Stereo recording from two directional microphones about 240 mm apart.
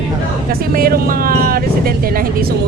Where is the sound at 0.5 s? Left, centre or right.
Right.